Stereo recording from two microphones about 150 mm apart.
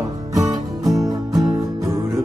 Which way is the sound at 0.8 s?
Centre (ahead or behind).